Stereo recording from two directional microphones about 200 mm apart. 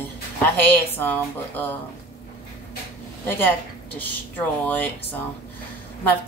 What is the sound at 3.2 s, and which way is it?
Speech, 10° left (ahead or behind).